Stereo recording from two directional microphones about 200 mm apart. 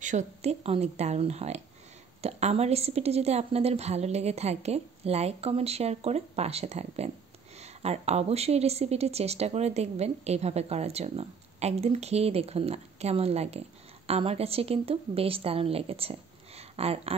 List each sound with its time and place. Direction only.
0.0 s speech: 35° right (ahead or behind)